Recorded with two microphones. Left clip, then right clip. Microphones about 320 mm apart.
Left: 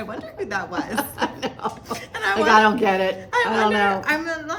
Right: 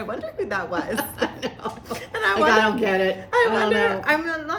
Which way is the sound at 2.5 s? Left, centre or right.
Centre.